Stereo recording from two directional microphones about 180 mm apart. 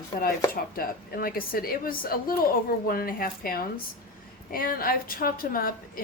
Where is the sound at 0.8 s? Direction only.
55° left (ahead or behind).